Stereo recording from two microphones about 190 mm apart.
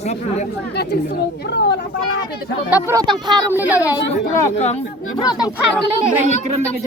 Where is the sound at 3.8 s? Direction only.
20° left (ahead or behind).